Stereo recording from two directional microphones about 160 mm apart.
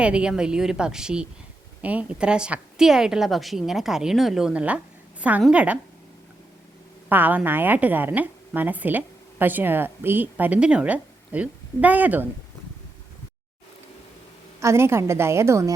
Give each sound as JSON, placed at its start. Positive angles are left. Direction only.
{"t": 0.0, "sound": "a woman's voice", "side_deg": -5}
{"t": 7.1, "sound": "a woman's voice", "side_deg": -10}
{"t": 14.6, "sound": "a woman's voice", "side_deg": -15}